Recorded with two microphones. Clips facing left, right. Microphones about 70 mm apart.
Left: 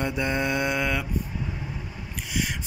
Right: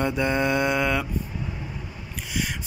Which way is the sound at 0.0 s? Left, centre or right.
Centre.